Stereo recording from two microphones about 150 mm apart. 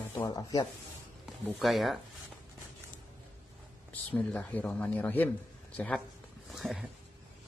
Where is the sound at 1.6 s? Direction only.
Centre (ahead or behind).